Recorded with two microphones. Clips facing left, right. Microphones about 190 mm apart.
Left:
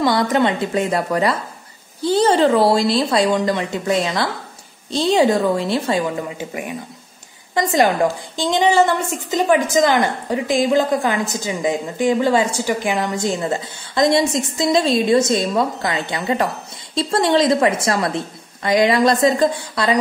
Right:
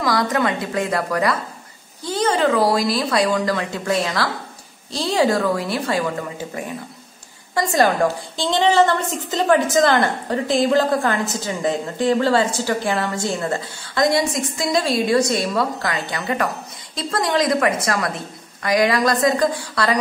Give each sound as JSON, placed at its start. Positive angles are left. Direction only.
{"t": 0.0, "sound": "a woman's voice", "side_deg": 25}